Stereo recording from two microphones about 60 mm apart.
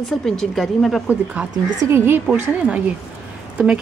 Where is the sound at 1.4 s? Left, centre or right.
Centre.